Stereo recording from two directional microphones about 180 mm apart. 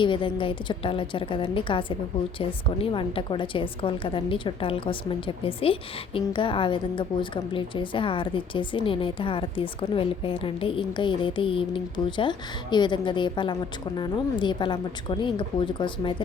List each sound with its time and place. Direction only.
0.0 s a woman's voice: 30° left (ahead or behind)